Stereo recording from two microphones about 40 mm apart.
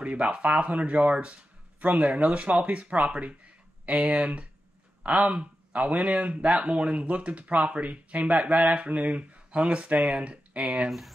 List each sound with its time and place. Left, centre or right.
0.0 s speech: right